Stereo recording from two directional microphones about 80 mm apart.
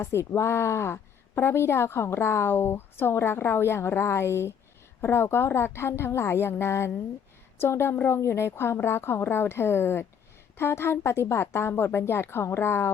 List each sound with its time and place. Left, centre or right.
0.0 s a woman's voice: left